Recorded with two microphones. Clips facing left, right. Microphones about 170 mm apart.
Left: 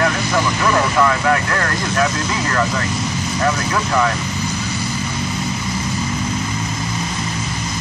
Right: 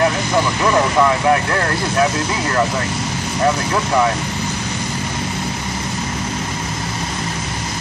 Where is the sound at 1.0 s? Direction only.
20° right (ahead or behind).